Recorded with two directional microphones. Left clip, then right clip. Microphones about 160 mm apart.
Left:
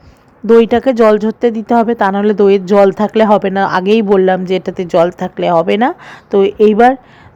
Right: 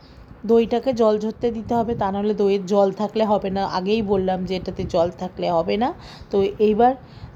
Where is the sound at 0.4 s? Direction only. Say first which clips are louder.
Left 10 dB; 40° left (ahead or behind).